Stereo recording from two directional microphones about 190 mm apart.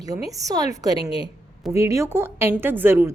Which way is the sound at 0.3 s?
20° right (ahead or behind).